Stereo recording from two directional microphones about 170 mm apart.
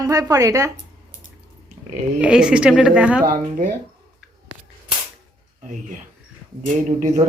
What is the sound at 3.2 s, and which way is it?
Speech, 55° right (ahead or behind).